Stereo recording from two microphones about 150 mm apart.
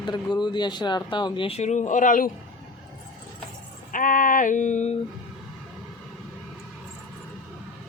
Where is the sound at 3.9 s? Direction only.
65° left (ahead or behind).